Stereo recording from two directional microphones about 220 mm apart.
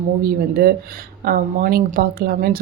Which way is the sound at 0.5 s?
45° right (ahead or behind).